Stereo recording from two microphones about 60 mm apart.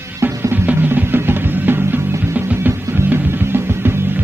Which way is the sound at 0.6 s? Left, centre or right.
Right.